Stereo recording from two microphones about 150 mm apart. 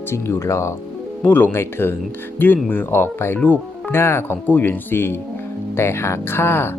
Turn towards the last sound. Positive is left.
turn(degrees=15)  # may be behind; listen again after turning